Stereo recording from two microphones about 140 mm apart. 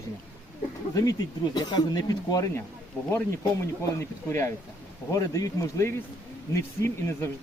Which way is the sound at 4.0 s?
20° left (ahead or behind).